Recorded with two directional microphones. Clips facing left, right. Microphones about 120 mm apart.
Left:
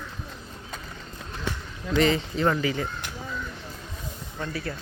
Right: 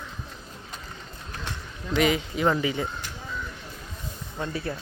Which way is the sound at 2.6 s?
20° right (ahead or behind).